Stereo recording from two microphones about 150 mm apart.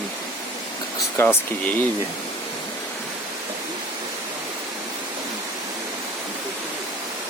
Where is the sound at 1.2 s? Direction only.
15° left (ahead or behind).